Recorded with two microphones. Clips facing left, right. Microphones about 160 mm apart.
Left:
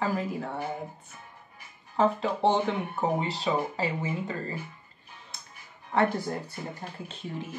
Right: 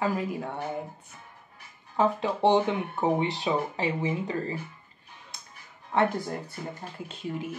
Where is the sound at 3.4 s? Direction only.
20° right (ahead or behind).